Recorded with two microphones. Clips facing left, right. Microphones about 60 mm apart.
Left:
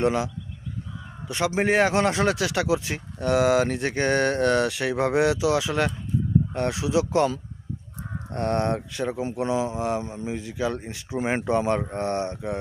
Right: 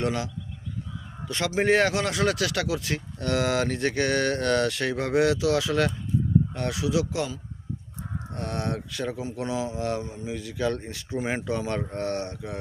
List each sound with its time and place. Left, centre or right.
0.0 s speech: left
1.3 s a man's voice: centre
1.9 s speech: left
3.9 s speech: left
8.3 s speech: left
10.6 s a man's voice: centre
10.9 s speech: left